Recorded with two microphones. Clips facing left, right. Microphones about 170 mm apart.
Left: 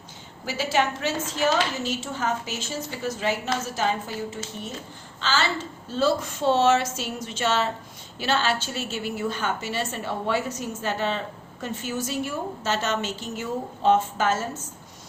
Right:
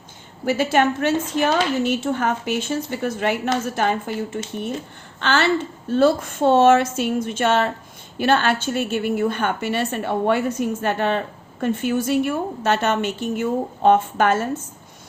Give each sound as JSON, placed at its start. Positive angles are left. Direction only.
{"t": 0.4, "sound": "a woman's voice", "side_deg": -55}